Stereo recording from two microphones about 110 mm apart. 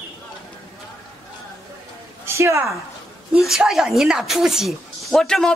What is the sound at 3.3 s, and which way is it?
Speech, 5° right (ahead or behind).